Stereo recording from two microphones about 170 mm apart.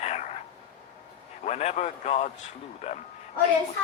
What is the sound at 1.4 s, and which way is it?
A man's voice, 40° left (ahead or behind).